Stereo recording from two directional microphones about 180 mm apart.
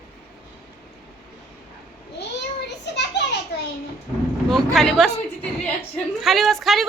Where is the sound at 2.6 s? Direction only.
75° left (ahead or behind).